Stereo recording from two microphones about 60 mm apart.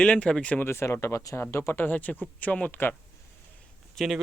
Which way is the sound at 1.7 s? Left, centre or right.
Left.